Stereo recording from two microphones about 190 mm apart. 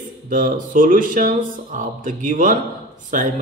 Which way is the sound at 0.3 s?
45° right (ahead or behind).